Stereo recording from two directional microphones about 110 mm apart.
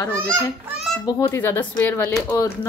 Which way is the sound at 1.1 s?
25° left (ahead or behind).